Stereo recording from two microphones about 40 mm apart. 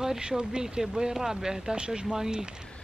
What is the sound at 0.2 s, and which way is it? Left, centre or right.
Speech, centre.